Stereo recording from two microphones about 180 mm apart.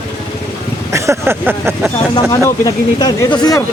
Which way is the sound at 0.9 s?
15° right (ahead or behind).